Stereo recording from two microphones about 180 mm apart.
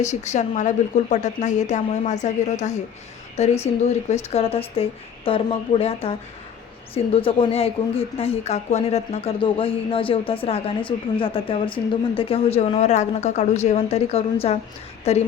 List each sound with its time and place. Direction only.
0.0 s a woman's voice: 40° left (ahead or behind)